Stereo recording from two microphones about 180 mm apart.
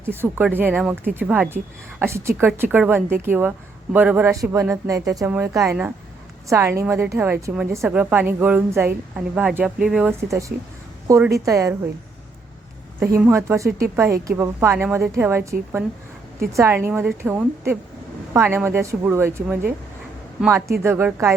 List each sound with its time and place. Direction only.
0.1 s a woman's voice: 10° right (ahead or behind)
13.0 s a woman's voice: 15° right (ahead or behind)
20.8 s a woman's voice: 15° right (ahead or behind)